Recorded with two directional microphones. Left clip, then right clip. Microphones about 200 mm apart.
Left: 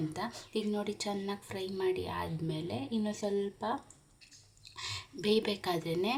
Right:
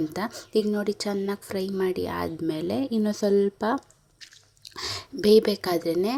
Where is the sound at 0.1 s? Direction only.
30° right (ahead or behind).